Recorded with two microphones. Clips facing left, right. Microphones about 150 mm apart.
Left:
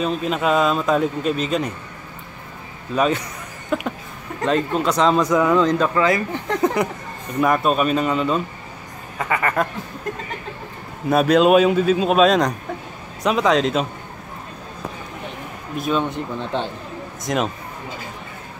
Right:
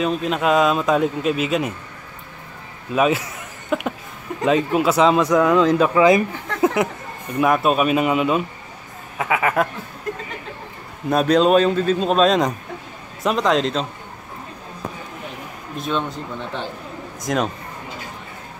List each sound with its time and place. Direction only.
0.0 s speech: centre (ahead or behind)
2.9 s speech: 5° right (ahead or behind)
6.6 s a sound: 5° right (ahead or behind)
7.3 s speech: 5° right (ahead or behind)
11.1 s speech: 5° left (ahead or behind)
15.8 s speech: 5° left (ahead or behind)
17.2 s a man's voice: centre (ahead or behind)